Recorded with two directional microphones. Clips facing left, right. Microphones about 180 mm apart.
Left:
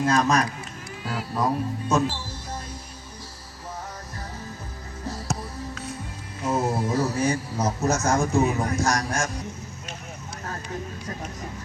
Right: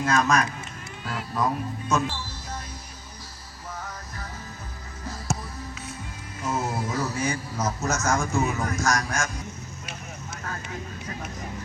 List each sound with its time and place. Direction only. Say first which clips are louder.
0.0 s a man's voice: left 1 dB; 35° left (ahead or behind)
6.4 s a man's voice: left 4 dB; 35° left (ahead or behind)